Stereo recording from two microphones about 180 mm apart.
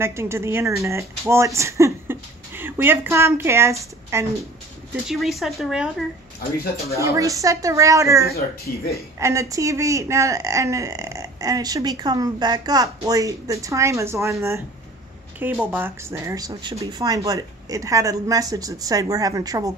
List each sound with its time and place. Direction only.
0.0 s speech: 15° right (ahead or behind)
5.0 s speech: centre (ahead or behind)
7.0 s speech: 15° right (ahead or behind)
8.7 s speech: 55° left (ahead or behind)
9.2 s speech: 15° right (ahead or behind)